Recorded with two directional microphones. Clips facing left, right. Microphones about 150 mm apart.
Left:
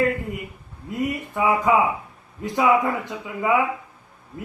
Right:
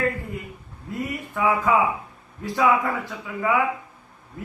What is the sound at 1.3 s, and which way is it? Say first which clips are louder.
A man's voice: left 1 dB; 20° left (ahead or behind).